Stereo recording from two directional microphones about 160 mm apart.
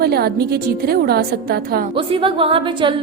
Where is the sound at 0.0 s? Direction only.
80° right.